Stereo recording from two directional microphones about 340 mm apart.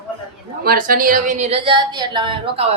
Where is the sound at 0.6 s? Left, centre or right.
Right.